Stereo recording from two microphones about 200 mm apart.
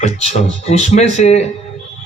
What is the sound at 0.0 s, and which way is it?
A man's voice, 30° left (ahead or behind).